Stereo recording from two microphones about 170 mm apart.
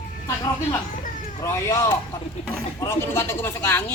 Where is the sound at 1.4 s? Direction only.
15° left (ahead or behind).